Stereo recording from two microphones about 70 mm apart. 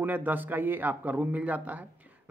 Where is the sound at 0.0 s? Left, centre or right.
Right.